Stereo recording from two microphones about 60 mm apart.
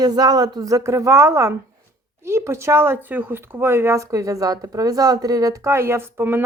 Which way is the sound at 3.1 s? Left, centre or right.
Right.